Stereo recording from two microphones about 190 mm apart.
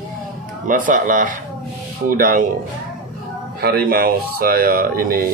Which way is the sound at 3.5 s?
55° right (ahead or behind).